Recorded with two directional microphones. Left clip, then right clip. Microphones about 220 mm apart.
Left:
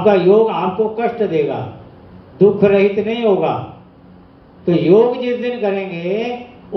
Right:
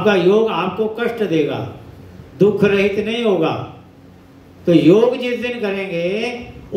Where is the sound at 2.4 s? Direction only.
50° right (ahead or behind).